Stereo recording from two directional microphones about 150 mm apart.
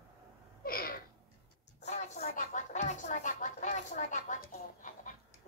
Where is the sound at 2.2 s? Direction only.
75° left (ahead or behind).